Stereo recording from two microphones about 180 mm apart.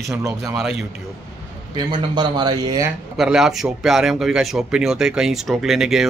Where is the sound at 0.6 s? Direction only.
5° right (ahead or behind).